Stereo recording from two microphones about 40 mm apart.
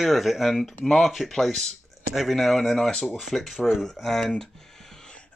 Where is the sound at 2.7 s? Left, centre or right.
Centre.